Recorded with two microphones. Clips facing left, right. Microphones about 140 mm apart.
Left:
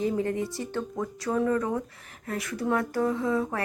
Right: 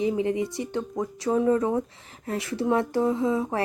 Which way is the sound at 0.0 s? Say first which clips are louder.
Right 3 dB; 15° right (ahead or behind).